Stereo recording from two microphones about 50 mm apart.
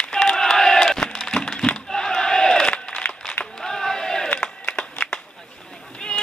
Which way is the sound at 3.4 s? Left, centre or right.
Centre.